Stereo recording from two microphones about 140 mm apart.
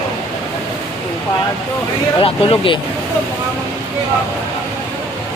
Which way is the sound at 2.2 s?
40° left (ahead or behind).